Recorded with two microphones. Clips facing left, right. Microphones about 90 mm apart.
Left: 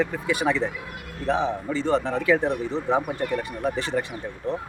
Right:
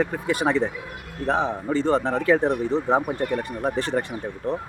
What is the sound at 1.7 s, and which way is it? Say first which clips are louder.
Speech: right 3 dB; 40° right (ahead or behind).